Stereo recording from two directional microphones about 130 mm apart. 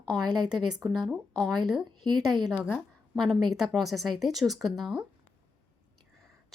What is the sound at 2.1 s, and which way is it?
Speech, 35° right (ahead or behind).